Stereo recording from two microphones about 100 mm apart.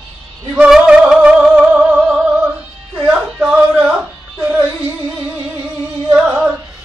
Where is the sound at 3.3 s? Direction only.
10° right (ahead or behind).